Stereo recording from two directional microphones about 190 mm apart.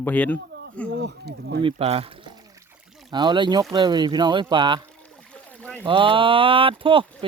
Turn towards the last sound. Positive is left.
turn(degrees=-30)  # may be behind; listen again after turning